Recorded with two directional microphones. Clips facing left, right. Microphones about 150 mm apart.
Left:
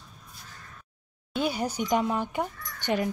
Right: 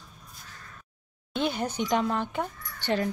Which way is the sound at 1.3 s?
5° left (ahead or behind).